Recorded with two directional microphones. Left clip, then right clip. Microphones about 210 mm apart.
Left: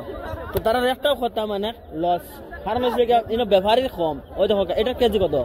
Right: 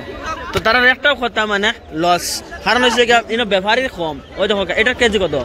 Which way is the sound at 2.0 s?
75° right (ahead or behind).